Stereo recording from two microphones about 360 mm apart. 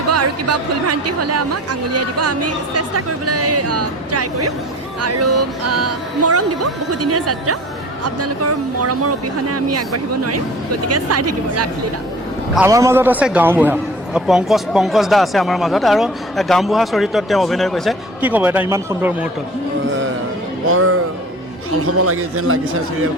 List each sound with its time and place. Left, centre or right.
0.1 s speech: right
12.5 s a man's voice: centre
20.7 s speech: right